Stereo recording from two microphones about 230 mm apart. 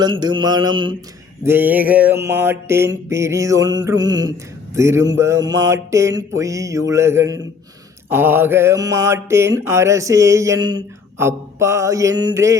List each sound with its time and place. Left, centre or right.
0.0 s mantra: centre
1.5 s mantra: centre